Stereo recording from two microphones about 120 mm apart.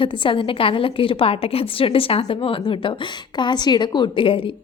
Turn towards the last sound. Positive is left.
turn(degrees=45)  # may be behind; listen again after turning